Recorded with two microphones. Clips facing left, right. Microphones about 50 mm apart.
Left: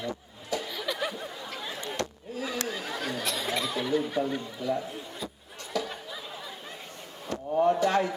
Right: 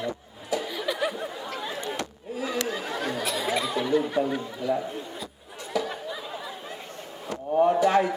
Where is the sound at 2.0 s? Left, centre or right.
Centre.